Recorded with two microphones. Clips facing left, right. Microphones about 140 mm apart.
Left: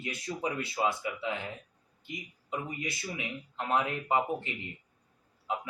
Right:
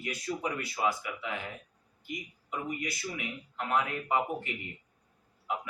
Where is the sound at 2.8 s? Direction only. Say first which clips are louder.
Even; 25° left (ahead or behind).